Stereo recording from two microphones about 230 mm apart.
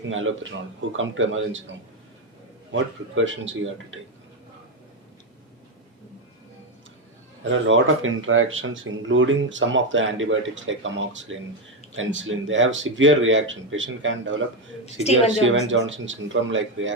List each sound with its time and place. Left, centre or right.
0.1 s speech: right
2.7 s speech: right
7.5 s speech: right
15.0 s speech: left
15.6 s speech: right